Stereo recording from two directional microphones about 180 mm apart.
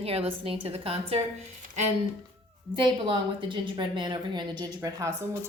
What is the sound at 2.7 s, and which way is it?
A woman's voice, 25° right (ahead or behind).